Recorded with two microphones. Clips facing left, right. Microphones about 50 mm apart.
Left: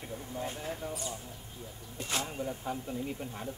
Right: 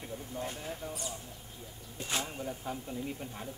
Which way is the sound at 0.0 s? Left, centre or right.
Centre.